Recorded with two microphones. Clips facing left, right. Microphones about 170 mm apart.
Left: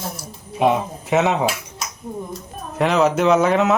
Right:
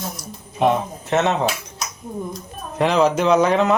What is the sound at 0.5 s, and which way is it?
Speech, 10° left (ahead or behind).